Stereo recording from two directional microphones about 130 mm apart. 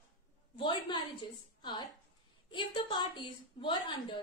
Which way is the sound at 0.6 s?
40° left (ahead or behind).